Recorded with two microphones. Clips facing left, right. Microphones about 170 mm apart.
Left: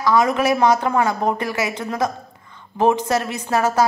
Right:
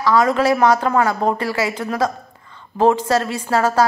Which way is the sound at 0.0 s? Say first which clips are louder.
Right 1 dB; 15° left (ahead or behind).